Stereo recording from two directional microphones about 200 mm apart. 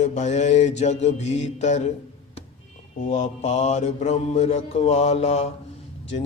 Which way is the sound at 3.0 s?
35° left (ahead or behind).